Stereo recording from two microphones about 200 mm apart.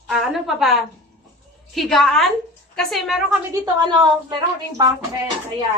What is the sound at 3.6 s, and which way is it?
Speech, 20° right (ahead or behind).